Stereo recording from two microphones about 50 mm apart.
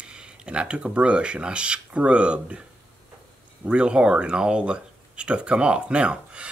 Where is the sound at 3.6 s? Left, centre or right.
Centre.